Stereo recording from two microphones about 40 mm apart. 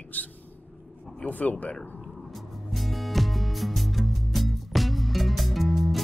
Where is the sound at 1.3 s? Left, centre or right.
Left.